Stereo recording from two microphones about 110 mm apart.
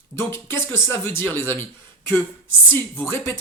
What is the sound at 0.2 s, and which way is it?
Speech, 20° left (ahead or behind).